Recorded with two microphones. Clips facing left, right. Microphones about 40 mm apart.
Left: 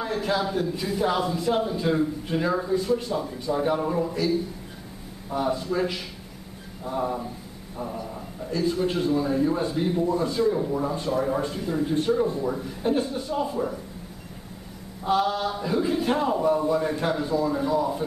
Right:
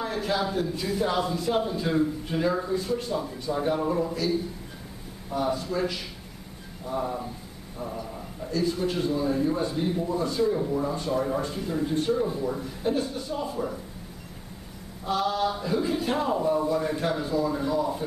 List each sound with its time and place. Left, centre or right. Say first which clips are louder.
0.0 s a man's voice: left 2 dB; centre
5.4 s a man's voice: left 2 dB; centre
7.0 s a man's voice: left 3 dB; centre
15.0 s a man's voice: left 2 dB; centre